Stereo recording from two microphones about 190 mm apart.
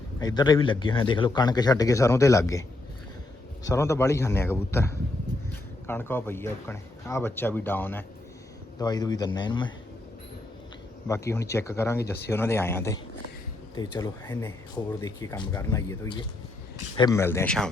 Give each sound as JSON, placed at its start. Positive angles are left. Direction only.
{"t": 0.2, "sound": "speech", "side_deg": 20}
{"t": 11.1, "sound": "speech", "side_deg": 15}